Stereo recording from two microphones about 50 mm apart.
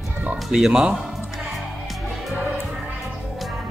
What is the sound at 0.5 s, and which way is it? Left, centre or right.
Speech, centre.